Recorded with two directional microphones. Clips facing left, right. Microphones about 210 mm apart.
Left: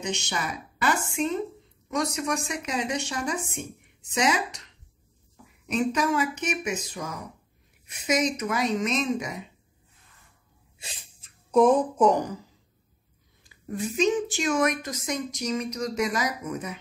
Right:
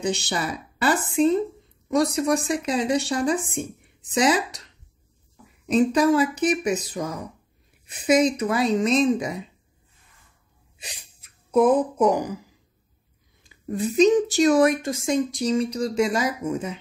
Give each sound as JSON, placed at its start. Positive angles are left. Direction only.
{"t": 0.0, "sound": "speech", "side_deg": -35}
{"t": 5.7, "sound": "speech", "side_deg": -35}
{"t": 11.5, "sound": "speech", "side_deg": -5}
{"t": 13.4, "sound": "speech", "side_deg": -35}